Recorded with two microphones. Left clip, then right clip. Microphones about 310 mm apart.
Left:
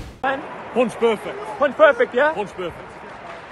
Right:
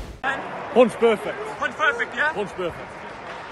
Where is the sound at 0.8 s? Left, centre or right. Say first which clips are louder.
Right 2 dB; centre.